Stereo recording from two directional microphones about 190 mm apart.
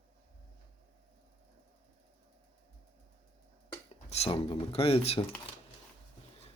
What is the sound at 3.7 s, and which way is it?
Speech, 30° left (ahead or behind).